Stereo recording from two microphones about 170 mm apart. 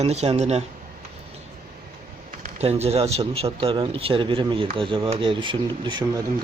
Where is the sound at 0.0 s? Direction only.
40° right (ahead or behind).